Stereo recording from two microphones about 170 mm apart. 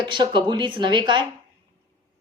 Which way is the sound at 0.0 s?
25° right (ahead or behind).